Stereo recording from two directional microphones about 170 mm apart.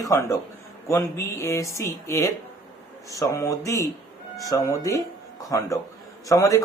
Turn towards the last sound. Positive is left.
turn(degrees=20)  # may be behind; listen again after turning